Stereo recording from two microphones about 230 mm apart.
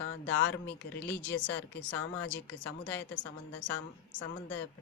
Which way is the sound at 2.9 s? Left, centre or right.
Centre.